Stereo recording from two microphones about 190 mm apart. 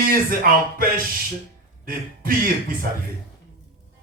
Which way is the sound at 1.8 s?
50° right (ahead or behind).